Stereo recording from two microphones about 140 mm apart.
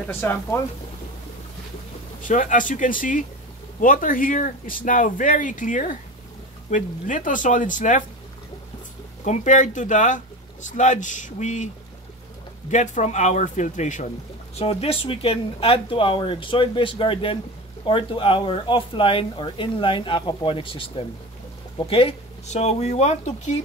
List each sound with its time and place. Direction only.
0.0 s speech: 15° left (ahead or behind)
2.2 s speech: 70° left (ahead or behind)
9.2 s speech: 60° left (ahead or behind)
12.7 s speech: 60° left (ahead or behind)
14.6 s speech: 45° left (ahead or behind)